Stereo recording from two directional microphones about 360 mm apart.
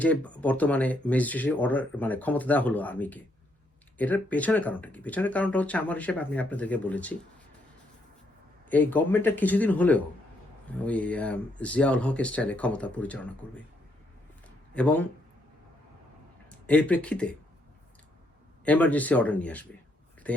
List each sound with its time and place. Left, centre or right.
0.0 s speech: centre
8.7 s speech: centre
14.7 s speech: centre
16.6 s speech: centre
18.6 s speech: centre
20.2 s a sound: centre